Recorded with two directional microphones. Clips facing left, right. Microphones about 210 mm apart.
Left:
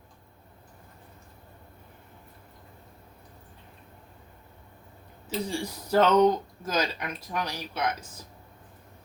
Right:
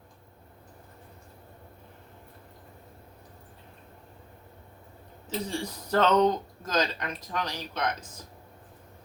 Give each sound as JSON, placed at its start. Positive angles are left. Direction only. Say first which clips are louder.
{"t": 5.5, "sound": "speech", "louder": "left 2 dB", "side_deg": 10}